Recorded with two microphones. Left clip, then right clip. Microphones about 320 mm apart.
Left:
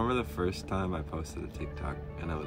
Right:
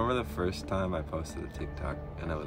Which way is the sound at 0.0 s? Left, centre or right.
Centre.